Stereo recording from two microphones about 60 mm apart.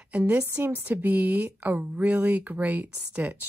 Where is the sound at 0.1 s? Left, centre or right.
Right.